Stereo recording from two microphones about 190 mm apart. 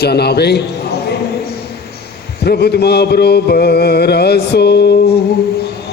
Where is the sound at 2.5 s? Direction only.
60° left (ahead or behind).